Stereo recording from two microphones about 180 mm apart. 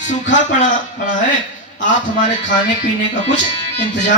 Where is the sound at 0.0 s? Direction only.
45° left (ahead or behind).